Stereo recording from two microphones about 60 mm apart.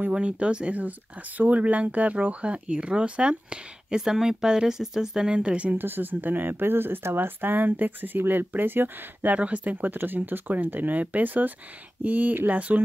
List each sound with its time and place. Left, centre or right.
0.1 s speech: centre
5.8 s speech: right
9.3 s speech: right